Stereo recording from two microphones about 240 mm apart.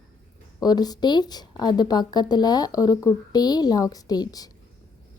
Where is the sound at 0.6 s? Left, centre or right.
Centre.